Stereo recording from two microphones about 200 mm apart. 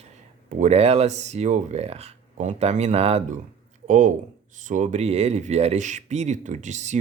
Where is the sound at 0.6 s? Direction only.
30° right (ahead or behind).